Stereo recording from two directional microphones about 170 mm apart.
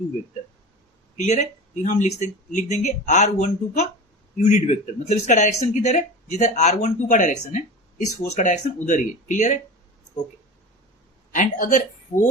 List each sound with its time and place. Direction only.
1.1 s speech: 45° left (ahead or behind)
11.3 s speech: 50° left (ahead or behind)